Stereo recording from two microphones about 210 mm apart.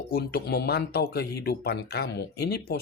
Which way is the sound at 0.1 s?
45° left (ahead or behind).